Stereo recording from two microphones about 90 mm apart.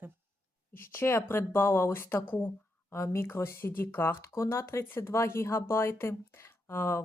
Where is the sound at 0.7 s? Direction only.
25° left (ahead or behind).